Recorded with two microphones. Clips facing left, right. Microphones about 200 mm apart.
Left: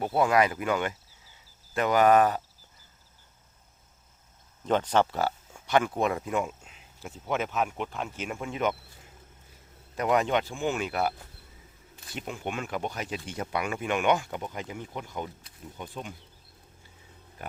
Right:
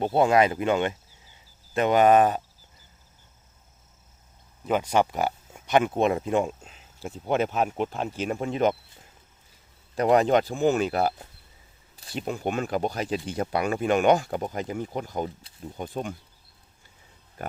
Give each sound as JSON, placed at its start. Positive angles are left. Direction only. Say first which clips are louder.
{"t": 0.0, "sound": "speech", "louder": "right 3 dB", "side_deg": -25}
{"t": 4.6, "sound": "speech", "louder": "right 1 dB", "side_deg": -10}
{"t": 9.9, "sound": "speech", "louder": "right 5 dB", "side_deg": -35}